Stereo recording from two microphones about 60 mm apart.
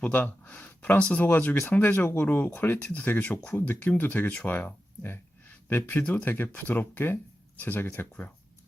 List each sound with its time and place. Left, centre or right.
0.0 s speech: left
1.2 s speech: left